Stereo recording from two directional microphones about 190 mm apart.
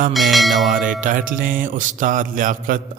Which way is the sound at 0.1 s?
Centre (ahead or behind).